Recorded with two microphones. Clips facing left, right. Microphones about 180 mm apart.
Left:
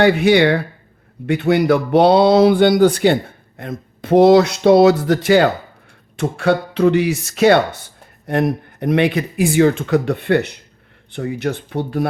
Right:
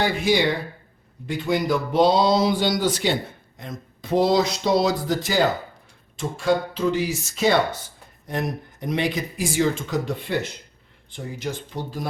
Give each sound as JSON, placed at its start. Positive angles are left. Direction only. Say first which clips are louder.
{"t": 0.0, "sound": "speech", "louder": "left 8 dB", "side_deg": 65}